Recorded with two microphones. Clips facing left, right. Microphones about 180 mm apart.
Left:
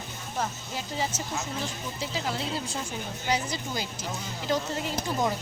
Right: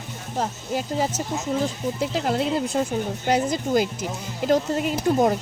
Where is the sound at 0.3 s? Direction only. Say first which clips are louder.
Right 7 dB; 40° right (ahead or behind).